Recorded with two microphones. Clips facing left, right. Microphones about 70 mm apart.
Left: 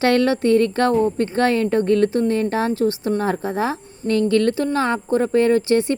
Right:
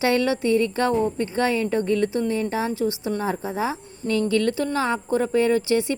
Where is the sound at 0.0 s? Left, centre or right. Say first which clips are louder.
Left 4 dB; left.